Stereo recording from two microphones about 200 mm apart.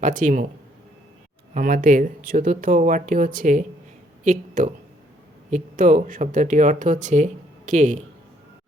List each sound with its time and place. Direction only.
0.0 s speech: 40° right (ahead or behind)
1.5 s speech: 40° right (ahead or behind)